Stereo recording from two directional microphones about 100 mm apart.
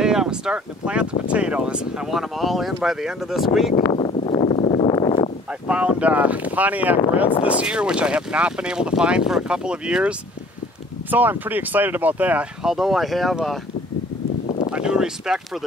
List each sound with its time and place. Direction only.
0.0 s speech: 5° right (ahead or behind)
3.9 s a sound: 65° left (ahead or behind)
4.9 s a sound: 50° left (ahead or behind)
5.7 s speech: 10° right (ahead or behind)
12.6 s speech: 5° right (ahead or behind)
14.7 s speech: 10° right (ahead or behind)